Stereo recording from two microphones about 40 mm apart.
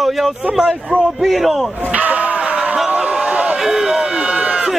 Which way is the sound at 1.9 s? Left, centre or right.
Right.